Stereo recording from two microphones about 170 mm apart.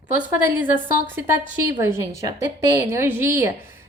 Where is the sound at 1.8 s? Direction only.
15° right (ahead or behind).